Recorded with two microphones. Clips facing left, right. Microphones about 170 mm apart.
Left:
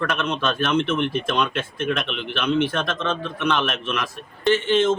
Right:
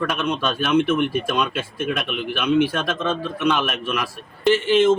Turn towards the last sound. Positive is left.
turn(degrees=-10)  # may be behind; listen again after turning